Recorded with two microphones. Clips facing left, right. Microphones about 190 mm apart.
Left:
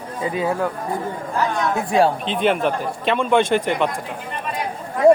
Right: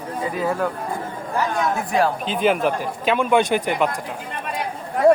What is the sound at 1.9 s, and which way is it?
Speech, 30° left (ahead or behind).